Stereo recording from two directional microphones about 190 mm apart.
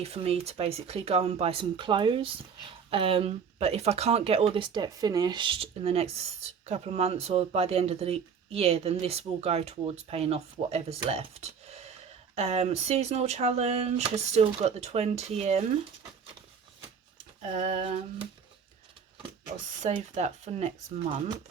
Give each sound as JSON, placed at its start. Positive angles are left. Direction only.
{"t": 0.0, "sound": "speech", "side_deg": -30}
{"t": 17.4, "sound": "speech", "side_deg": -35}
{"t": 19.8, "sound": "speech", "side_deg": -35}